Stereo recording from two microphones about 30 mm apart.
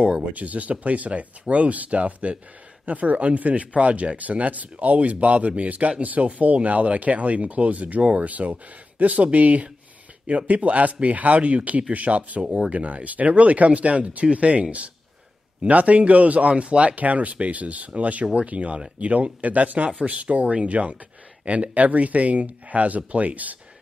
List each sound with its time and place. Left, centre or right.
0.3 s speech: right
16.9 s speech: right
20.0 s speech: right